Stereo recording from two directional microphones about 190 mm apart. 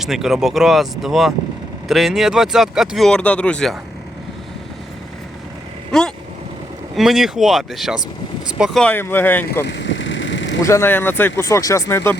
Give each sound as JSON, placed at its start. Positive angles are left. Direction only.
{"t": 0.0, "sound": "speech", "side_deg": 0}
{"t": 5.9, "sound": "vehicle", "side_deg": 5}
{"t": 6.9, "sound": "speech", "side_deg": 0}
{"t": 9.6, "sound": "vehicle", "side_deg": 70}
{"t": 10.6, "sound": "speech", "side_deg": 15}